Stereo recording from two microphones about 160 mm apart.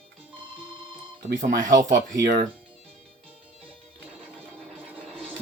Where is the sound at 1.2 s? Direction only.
55° right (ahead or behind).